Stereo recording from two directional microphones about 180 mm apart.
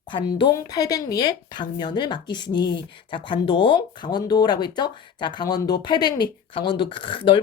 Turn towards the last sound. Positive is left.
turn(degrees=30)  # may be behind; listen again after turning